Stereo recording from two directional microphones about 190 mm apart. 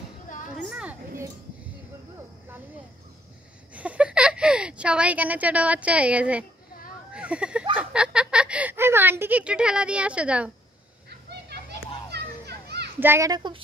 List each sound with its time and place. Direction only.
0.6 s a sound: 5° right (ahead or behind)
3.7 s a woman's voice: 5° right (ahead or behind)
12.1 s children playing: 60° right (ahead or behind)
13.0 s a child's voice: 15° right (ahead or behind)